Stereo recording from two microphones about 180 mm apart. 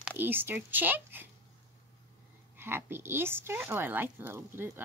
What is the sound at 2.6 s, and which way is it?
Speech, 10° right (ahead or behind).